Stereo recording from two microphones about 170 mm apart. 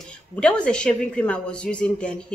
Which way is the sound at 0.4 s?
5° left (ahead or behind).